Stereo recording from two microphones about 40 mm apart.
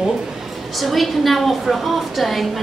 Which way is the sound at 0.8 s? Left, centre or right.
Centre.